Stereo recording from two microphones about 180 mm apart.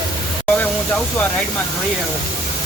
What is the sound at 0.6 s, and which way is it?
Speech, 5° left (ahead or behind).